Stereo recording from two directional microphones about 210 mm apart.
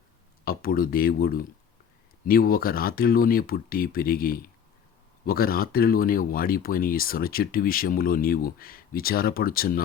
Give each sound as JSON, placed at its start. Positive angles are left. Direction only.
{"t": 0.4, "sound": "speech", "side_deg": 45}